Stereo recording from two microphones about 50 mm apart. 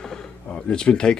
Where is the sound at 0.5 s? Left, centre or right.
Left.